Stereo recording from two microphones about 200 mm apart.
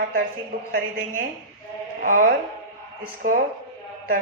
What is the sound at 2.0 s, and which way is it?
Speech, 40° right (ahead or behind).